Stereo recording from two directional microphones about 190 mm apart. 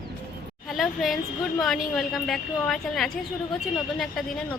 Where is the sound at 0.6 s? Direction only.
Centre (ahead or behind).